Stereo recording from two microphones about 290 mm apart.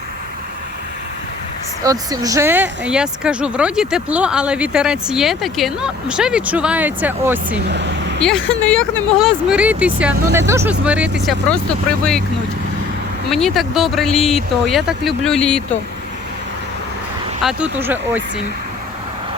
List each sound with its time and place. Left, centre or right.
1.8 s speech: centre
7.7 s speech: right
8.7 s speech: centre
13.3 s speech: centre
17.4 s speech: centre